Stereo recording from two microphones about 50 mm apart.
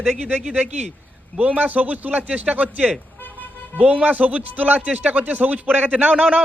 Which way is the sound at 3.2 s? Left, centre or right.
Left.